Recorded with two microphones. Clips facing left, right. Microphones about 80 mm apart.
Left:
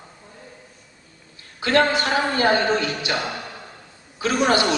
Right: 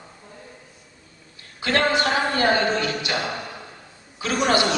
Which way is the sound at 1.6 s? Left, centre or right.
Left.